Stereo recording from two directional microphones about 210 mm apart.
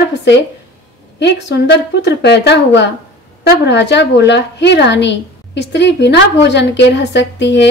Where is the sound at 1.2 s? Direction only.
55° left (ahead or behind).